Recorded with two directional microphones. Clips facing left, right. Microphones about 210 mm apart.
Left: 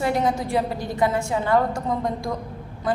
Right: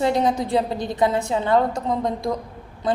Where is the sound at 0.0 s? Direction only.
20° right (ahead or behind).